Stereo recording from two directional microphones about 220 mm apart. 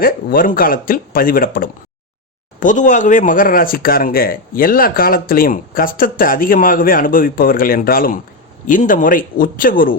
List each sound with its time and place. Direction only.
0.0 s speech: 40° left (ahead or behind)